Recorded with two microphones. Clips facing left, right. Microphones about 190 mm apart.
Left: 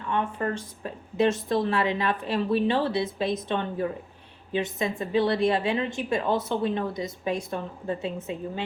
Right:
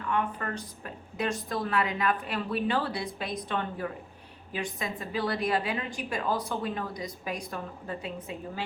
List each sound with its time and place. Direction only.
0.1 s a woman's voice: 25° left (ahead or behind)